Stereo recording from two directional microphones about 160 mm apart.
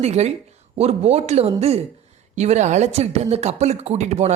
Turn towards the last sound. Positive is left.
turn(degrees=-45)  # may be behind; listen again after turning